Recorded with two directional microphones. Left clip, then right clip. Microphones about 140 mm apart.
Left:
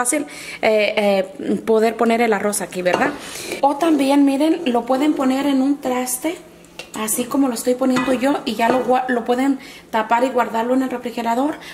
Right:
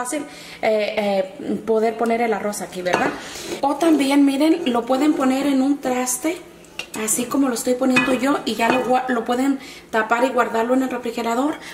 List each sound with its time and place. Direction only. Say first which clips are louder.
0.0 s a woman's voice: left 5 dB; 30° left (ahead or behind)
3.6 s speech: left 2 dB; 15° left (ahead or behind)